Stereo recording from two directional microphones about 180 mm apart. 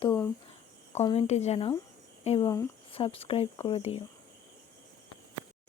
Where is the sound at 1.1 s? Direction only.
40° left (ahead or behind).